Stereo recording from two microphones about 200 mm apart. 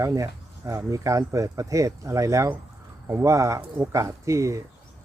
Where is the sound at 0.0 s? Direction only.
15° right (ahead or behind).